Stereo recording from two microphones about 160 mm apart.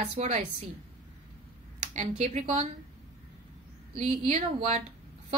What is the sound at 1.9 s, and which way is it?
Speech, 45° right (ahead or behind).